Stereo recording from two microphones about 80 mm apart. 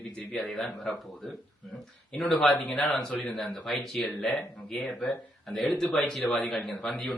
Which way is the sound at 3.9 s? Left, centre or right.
Centre.